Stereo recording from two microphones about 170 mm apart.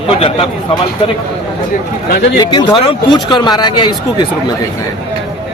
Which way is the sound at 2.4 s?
25° left (ahead or behind).